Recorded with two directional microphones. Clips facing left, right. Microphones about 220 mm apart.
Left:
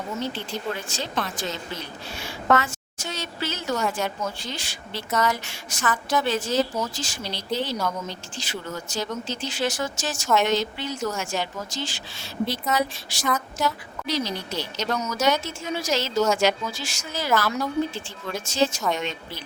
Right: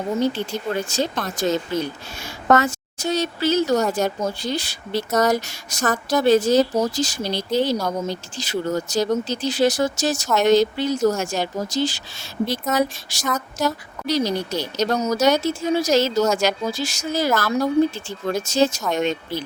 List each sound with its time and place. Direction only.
0.2 s speech: 45° right (ahead or behind)